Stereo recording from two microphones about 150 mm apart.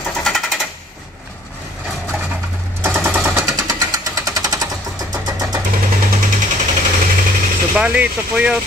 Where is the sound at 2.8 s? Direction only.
15° right (ahead or behind).